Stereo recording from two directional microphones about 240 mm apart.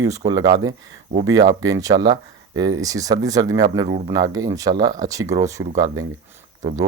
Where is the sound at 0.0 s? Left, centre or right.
Centre.